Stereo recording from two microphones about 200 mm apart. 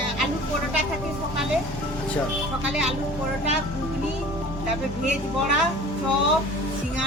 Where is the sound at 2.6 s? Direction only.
Centre (ahead or behind).